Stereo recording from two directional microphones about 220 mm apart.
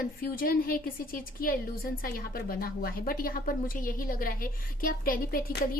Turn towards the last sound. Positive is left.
turn(degrees=40)  # may be behind; listen again after turning